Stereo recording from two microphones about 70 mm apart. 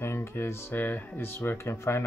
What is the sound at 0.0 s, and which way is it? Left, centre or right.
Speech, left.